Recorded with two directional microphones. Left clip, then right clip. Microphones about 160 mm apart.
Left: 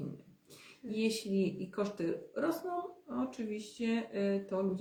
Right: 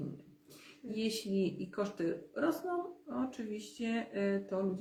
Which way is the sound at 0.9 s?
5° left (ahead or behind).